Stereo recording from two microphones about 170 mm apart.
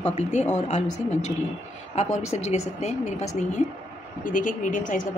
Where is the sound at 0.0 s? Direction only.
40° left (ahead or behind).